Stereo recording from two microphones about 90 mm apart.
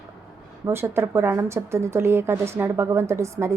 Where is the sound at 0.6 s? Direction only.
25° right (ahead or behind).